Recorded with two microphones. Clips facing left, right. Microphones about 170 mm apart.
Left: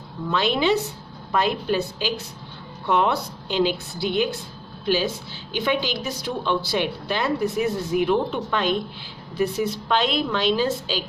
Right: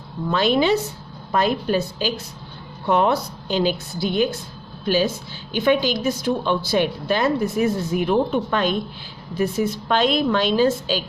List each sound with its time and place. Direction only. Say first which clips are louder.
0.3 s a woman's voice: right 3 dB; 45° right (ahead or behind)